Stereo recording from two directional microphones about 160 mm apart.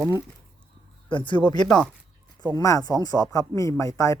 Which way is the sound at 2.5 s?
20° left (ahead or behind).